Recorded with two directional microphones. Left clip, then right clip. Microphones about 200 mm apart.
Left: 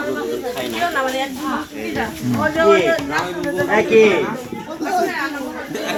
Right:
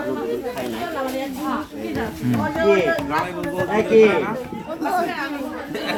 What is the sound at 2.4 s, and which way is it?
Speech, 30° left (ahead or behind).